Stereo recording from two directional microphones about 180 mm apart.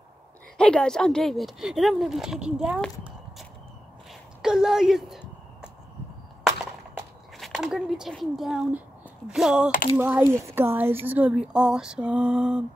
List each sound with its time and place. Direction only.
0.6 s a woman's voice: 5° left (ahead or behind)
7.3 s speech: centre (ahead or behind)